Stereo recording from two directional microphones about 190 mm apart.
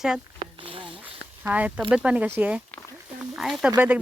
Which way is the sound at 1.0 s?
10° right (ahead or behind).